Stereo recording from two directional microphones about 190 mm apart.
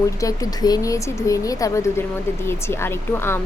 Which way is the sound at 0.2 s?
20° left (ahead or behind).